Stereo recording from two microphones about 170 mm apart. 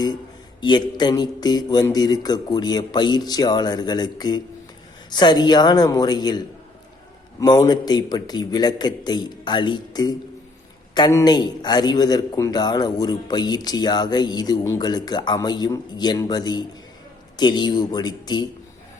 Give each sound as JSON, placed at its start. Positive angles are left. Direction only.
{"t": 0.6, "sound": "a man's voice", "side_deg": 25}